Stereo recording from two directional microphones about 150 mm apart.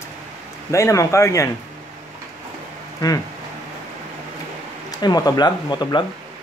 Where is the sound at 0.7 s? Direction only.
20° left (ahead or behind).